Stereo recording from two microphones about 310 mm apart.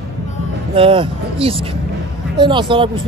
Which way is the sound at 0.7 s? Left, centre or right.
Centre.